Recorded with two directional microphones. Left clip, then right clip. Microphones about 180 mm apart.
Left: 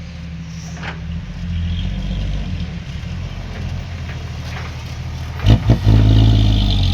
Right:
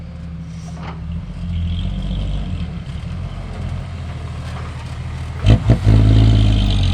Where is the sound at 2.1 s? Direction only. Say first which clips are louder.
Even; 15° left (ahead or behind).